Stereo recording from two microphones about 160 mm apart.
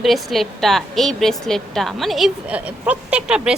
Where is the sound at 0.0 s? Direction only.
Centre (ahead or behind).